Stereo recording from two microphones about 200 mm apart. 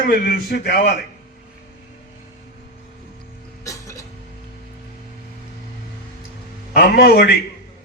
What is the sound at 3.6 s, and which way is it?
Cough, 15° left (ahead or behind).